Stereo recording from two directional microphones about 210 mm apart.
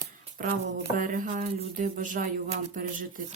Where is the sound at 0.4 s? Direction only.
40° right (ahead or behind).